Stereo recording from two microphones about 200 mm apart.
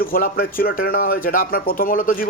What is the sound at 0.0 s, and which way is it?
A man's voice, 45° left (ahead or behind).